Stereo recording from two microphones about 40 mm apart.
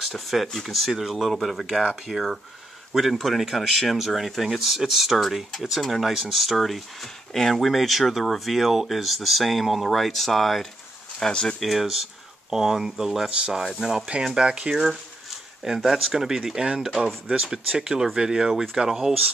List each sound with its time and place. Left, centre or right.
0.0 s speech: centre
11.6 s speech: centre; by 14.8 s right
15.6 s speech: centre